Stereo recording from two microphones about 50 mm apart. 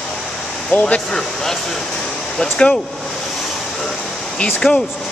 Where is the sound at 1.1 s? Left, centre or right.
Centre.